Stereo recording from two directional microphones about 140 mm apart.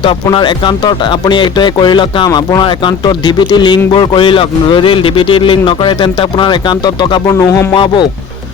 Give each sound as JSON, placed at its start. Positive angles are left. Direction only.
{"t": 0.0, "sound": "speech", "side_deg": 35}